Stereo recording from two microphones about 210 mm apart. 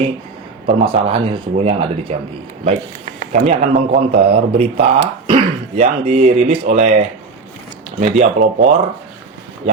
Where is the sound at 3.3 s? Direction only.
40° right (ahead or behind).